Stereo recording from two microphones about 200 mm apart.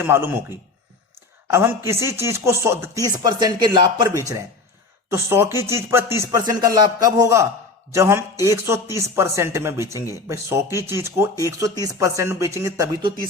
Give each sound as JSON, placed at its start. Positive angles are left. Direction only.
{"t": 0.0, "sound": "speech", "side_deg": -10}
{"t": 1.5, "sound": "speech", "side_deg": -15}